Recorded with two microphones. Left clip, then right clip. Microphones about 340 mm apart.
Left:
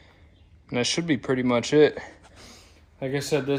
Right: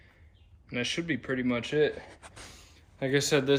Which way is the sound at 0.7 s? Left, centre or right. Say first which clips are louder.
Left 6 dB; centre.